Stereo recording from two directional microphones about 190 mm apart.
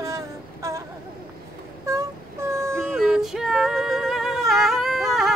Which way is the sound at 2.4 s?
15° right (ahead or behind).